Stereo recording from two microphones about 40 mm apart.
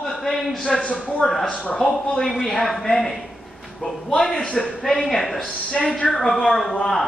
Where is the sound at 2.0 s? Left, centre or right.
Centre.